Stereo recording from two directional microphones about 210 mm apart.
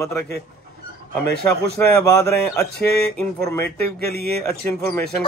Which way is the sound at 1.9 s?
15° left (ahead or behind).